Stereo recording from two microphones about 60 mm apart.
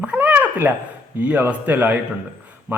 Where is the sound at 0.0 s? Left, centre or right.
Right.